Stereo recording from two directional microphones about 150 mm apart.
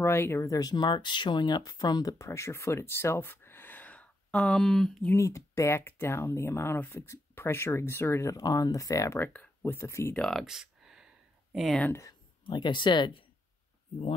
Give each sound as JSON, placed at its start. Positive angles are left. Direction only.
{"t": 0.0, "sound": "speech", "side_deg": 15}
{"t": 5.1, "sound": "speech", "side_deg": 20}
{"t": 10.1, "sound": "a sound", "side_deg": 5}
{"t": 11.5, "sound": "speech", "side_deg": 0}
{"t": 11.8, "sound": "speech", "side_deg": 20}
{"t": 12.4, "sound": "speech", "side_deg": 30}